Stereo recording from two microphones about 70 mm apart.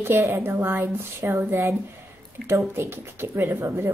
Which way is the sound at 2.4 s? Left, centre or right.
Right.